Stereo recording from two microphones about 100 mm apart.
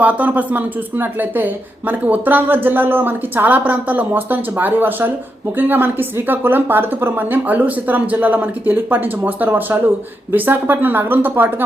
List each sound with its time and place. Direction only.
0.0 s speech: 15° right (ahead or behind)